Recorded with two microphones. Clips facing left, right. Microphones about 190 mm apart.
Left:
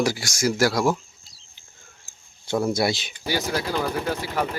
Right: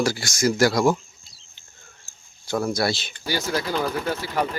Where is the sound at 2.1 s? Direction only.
25° left (ahead or behind).